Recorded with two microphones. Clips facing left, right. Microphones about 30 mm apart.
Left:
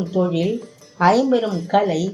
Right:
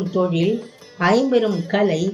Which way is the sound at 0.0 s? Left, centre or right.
Right.